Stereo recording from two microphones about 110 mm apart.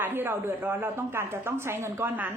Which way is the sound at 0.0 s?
20° right (ahead or behind).